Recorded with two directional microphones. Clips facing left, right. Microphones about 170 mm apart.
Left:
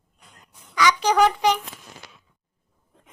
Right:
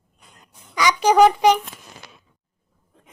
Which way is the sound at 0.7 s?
15° right (ahead or behind).